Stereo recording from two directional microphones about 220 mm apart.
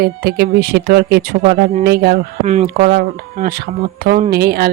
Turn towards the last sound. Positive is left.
turn(degrees=-45)  # may be behind; listen again after turning